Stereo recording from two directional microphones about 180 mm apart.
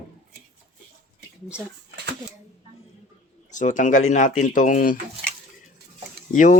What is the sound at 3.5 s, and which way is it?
Speech, 45° left (ahead or behind).